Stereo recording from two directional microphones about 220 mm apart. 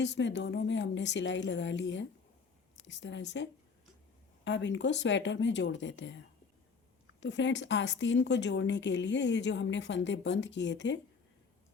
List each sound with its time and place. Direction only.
0.0 s a woman's voice: 55° left (ahead or behind)